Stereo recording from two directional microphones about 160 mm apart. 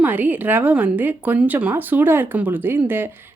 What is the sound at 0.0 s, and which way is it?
Speech, 10° right (ahead or behind).